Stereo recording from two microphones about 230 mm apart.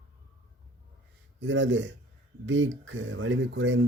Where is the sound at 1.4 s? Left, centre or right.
Right.